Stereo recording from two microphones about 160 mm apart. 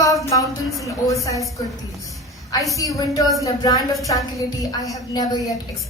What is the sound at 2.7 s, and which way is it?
A woman's voice, 20° left (ahead or behind).